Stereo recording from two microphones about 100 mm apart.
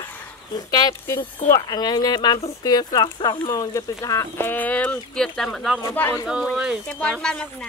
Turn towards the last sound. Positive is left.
turn(degrees=5)  # may be behind; listen again after turning